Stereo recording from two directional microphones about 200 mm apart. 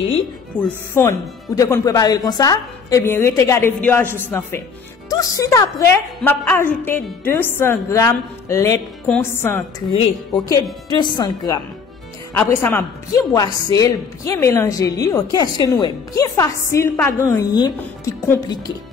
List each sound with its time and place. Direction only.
0.9 s a woman's voice: 15° left (ahead or behind)